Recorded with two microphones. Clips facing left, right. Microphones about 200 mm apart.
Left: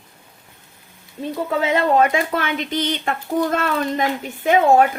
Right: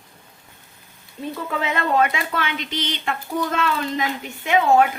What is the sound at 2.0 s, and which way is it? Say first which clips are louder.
Speech: left 4 dB; 45° left (ahead or behind).